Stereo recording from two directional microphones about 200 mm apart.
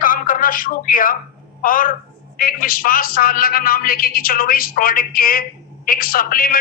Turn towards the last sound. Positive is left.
turn(degrees=45)  # may be behind; listen again after turning